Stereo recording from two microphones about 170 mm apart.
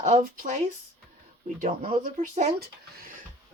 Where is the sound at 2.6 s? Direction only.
60° right (ahead or behind).